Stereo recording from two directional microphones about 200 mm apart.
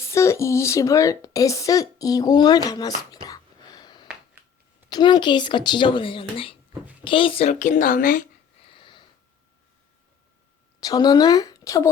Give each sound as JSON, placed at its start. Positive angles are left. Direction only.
{"t": 0.0, "sound": "a woman's voice", "side_deg": 15}
{"t": 8.6, "sound": "a sound", "side_deg": 25}
{"t": 10.8, "sound": "a woman's voice", "side_deg": 20}